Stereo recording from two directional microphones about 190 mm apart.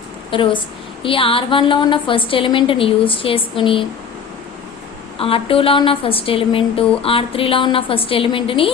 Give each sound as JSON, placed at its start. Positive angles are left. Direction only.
{"t": 0.3, "sound": "a woman's voice", "side_deg": 25}
{"t": 5.1, "sound": "a woman's voice", "side_deg": 30}